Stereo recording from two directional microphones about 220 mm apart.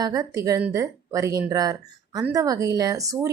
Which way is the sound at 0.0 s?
15° right (ahead or behind).